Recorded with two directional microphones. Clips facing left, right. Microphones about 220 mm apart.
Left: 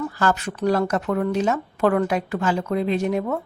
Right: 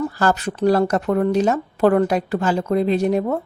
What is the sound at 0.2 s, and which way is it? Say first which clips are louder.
Speech: right 2 dB; 35° right (ahead or behind).